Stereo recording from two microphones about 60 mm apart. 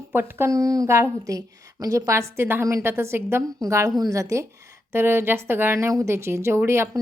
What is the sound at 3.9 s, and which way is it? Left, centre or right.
Speech, right.